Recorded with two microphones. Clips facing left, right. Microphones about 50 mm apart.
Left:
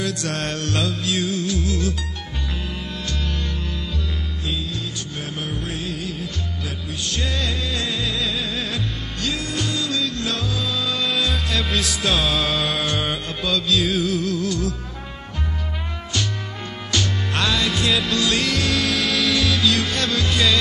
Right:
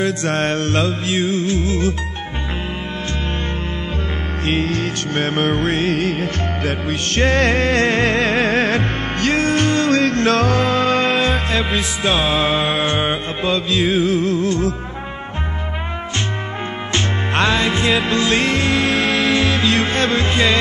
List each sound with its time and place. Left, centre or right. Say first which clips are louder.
0.0 s music: right 7 dB; right
4.5 s music: right 10 dB; right
16.9 s music: right 3 dB; right